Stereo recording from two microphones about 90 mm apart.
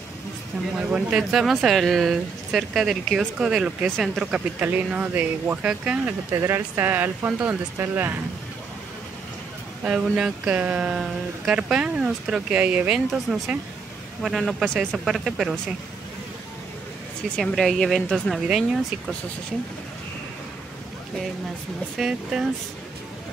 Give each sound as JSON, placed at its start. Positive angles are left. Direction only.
{"t": 0.7, "sound": "speech", "side_deg": -10}
{"t": 4.6, "sound": "speech", "side_deg": -20}
{"t": 6.3, "sound": "speech", "side_deg": -30}
{"t": 9.8, "sound": "speech", "side_deg": -10}
{"t": 15.0, "sound": "speech", "side_deg": -5}
{"t": 17.4, "sound": "speech", "side_deg": 0}
{"t": 21.9, "sound": "speech", "side_deg": -5}